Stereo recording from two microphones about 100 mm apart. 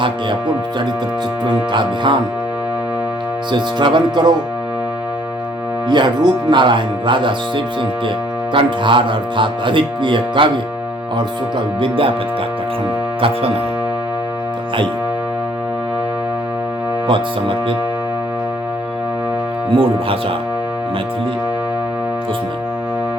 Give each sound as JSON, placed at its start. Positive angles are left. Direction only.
{"t": 1.5, "sound": "speech", "side_deg": -50}
{"t": 3.5, "sound": "speech", "side_deg": -50}
{"t": 5.9, "sound": "speech", "side_deg": -50}
{"t": 11.8, "sound": "speech", "side_deg": -65}
{"t": 17.1, "sound": "speech", "side_deg": -60}
{"t": 19.7, "sound": "speech", "side_deg": -65}